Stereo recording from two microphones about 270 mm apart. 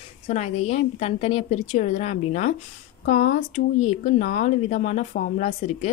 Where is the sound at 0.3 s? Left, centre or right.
Left.